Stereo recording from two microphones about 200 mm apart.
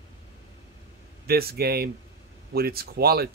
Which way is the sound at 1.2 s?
50° right (ahead or behind).